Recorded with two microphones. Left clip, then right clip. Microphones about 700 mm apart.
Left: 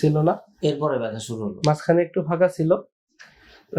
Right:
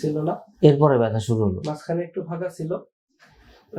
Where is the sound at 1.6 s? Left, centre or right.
Left.